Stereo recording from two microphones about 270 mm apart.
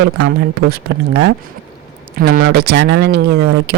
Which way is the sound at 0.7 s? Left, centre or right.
Right.